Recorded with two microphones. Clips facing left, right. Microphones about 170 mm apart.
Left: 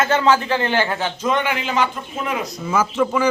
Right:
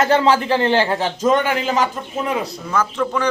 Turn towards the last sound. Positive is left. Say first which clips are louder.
# left 1 dB
turn(degrees=5)  # may be behind; listen again after turning